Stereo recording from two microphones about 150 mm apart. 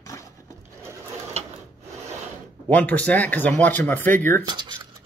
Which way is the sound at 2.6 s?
10° left (ahead or behind).